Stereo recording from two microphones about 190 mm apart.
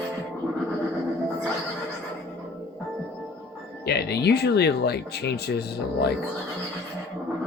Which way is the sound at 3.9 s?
60° left (ahead or behind).